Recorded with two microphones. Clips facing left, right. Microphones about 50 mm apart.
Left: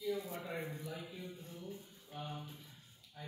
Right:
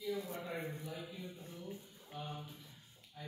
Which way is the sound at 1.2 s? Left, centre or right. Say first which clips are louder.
Even; right.